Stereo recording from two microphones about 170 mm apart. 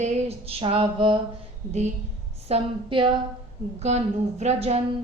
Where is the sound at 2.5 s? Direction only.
30° right (ahead or behind).